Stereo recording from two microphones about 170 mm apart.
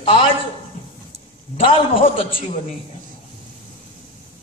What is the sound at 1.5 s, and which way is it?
A man's voice, 30° left (ahead or behind).